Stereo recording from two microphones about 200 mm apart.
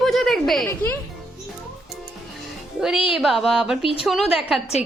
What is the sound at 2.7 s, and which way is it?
A woman's voice, 5° right (ahead or behind).